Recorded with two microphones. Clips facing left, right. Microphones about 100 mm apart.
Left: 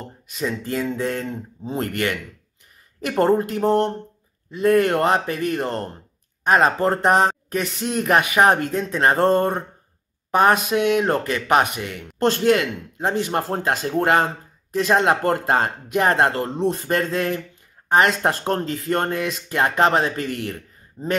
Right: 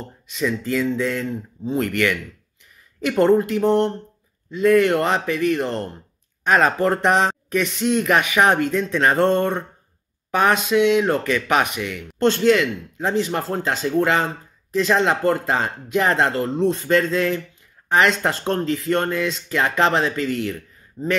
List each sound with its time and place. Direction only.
0.3 s speech: 45° left (ahead or behind)